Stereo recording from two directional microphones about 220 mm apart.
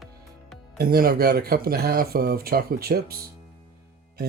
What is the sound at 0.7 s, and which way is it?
Speech, 45° right (ahead or behind).